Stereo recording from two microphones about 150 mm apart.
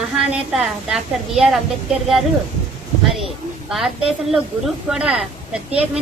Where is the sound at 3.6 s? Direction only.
Centre (ahead or behind).